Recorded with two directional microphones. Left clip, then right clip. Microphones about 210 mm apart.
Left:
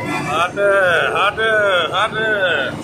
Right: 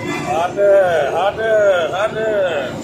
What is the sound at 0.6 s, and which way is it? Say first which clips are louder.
A man's voice: right 2 dB; 15° left (ahead or behind).